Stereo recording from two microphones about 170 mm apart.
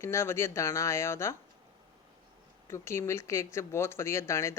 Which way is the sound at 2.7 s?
15° left (ahead or behind).